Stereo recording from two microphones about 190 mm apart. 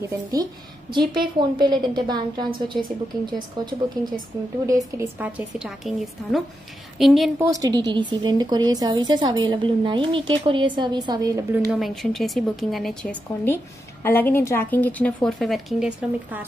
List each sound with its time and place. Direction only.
0.0 s a woman's voice: 20° right (ahead or behind); by 7.2 s centre (ahead or behind)
7.3 s a woman's voice: 15° right (ahead or behind)
11.7 s a woman's voice: centre (ahead or behind)